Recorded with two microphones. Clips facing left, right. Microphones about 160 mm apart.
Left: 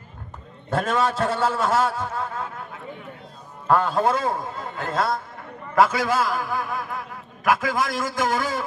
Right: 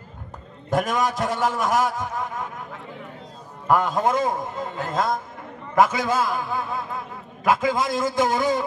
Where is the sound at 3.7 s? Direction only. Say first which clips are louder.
Even; 15° right (ahead or behind).